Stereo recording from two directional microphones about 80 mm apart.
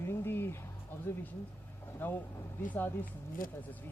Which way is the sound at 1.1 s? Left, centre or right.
Left.